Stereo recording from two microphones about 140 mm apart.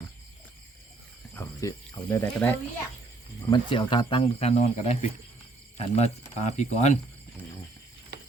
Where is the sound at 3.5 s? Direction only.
35° left (ahead or behind); by 7.0 s 55° left (ahead or behind).